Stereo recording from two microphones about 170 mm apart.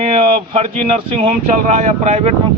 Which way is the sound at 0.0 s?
40° right (ahead or behind).